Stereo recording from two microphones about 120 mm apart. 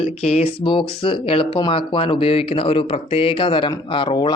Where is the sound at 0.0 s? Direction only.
55° left (ahead or behind).